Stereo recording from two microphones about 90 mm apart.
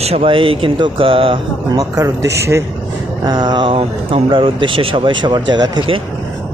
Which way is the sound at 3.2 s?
50° right (ahead or behind).